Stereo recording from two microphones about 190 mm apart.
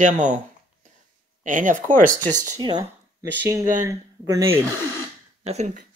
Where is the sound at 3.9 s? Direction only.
15° right (ahead or behind).